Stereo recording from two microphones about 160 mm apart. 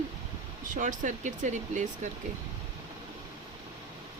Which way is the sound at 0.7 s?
50° right (ahead or behind).